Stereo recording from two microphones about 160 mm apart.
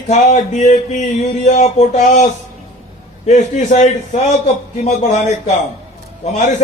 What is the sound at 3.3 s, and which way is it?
Speech, 45° left (ahead or behind).